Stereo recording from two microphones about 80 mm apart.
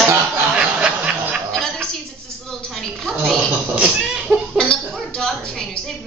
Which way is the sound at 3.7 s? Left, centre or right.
Centre.